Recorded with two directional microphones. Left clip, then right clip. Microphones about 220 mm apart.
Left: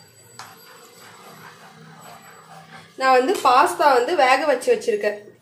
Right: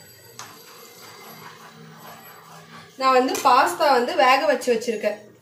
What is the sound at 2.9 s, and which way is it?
Speech, 45° left (ahead or behind).